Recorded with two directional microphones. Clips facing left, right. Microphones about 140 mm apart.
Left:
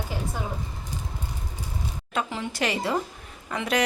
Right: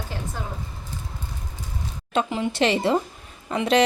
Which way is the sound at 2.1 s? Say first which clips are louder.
Right 6 dB; 20° right (ahead or behind).